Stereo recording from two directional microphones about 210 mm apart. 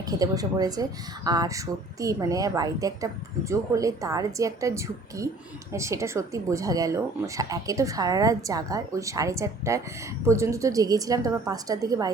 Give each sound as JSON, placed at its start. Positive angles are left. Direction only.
{"t": 0.0, "sound": "speech", "side_deg": -15}